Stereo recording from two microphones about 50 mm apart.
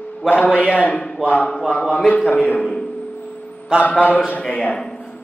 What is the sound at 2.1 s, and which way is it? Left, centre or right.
Speech, left.